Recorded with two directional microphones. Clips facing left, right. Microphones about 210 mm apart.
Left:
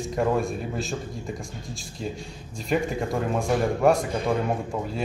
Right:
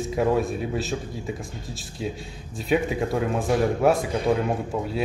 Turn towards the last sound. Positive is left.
turn(degrees=0)  # may be behind; listen again after turning